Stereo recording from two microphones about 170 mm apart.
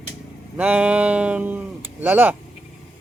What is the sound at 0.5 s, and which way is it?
A man's voice, 10° right (ahead or behind).